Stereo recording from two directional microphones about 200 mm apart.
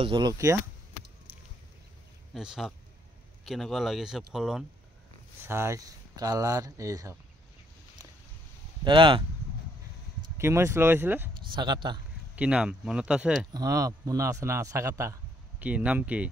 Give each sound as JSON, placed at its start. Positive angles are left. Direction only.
{"t": 0.0, "sound": "speech", "side_deg": -20}
{"t": 2.3, "sound": "speech", "side_deg": 0}
{"t": 5.5, "sound": "a man's voice", "side_deg": -15}
{"t": 8.8, "sound": "speech", "side_deg": -25}
{"t": 10.3, "sound": "a man's voice", "side_deg": -15}
{"t": 11.5, "sound": "speech", "side_deg": -20}
{"t": 12.4, "sound": "speech", "side_deg": -5}
{"t": 13.5, "sound": "a man's voice", "side_deg": -20}